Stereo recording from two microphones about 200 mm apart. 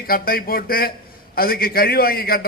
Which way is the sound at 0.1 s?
45° left (ahead or behind).